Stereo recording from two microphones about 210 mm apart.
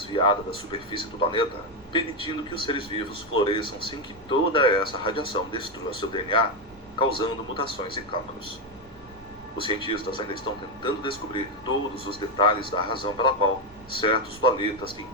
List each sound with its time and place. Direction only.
0.0 s a man's voice: 25° left (ahead or behind)
9.6 s a man's voice: 25° left (ahead or behind)